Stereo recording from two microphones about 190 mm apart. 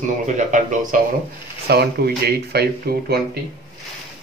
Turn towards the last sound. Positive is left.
turn(degrees=-55)  # may be behind; listen again after turning